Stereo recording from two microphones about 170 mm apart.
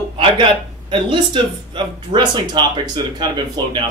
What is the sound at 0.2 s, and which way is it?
Speech, 30° right (ahead or behind).